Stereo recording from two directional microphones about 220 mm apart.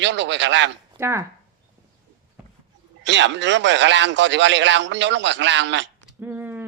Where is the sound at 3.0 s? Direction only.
55° right (ahead or behind).